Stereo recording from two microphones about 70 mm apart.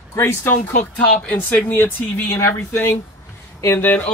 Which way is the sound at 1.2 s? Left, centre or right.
Left.